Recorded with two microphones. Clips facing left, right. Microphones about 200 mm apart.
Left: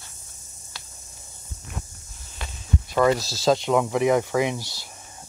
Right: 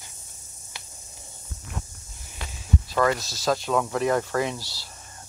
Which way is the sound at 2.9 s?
15° left (ahead or behind).